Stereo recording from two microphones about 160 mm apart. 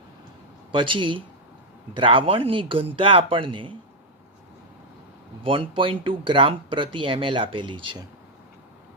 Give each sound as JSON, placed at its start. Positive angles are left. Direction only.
{"t": 0.7, "sound": "speech", "side_deg": -30}
{"t": 5.4, "sound": "speech", "side_deg": -35}